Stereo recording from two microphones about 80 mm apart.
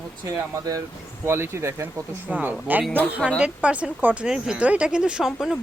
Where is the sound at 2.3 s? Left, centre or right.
Centre.